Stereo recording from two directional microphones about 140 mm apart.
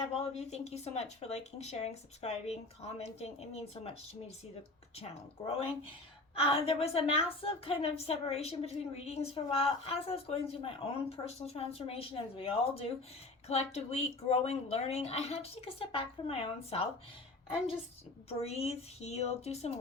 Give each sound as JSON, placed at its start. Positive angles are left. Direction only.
{"t": 0.2, "sound": "a woman's voice", "side_deg": 50}
{"t": 4.9, "sound": "a woman's voice", "side_deg": 45}
{"t": 18.3, "sound": "a woman's voice", "side_deg": 45}